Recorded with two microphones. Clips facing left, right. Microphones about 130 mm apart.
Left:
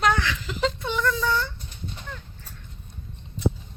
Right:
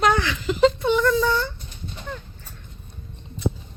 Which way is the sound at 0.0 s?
5° right (ahead or behind).